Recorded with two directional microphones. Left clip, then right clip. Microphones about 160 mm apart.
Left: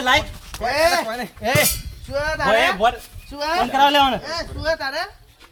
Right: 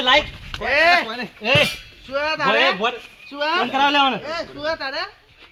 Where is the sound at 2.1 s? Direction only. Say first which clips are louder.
Right 1 dB; 55° left (ahead or behind).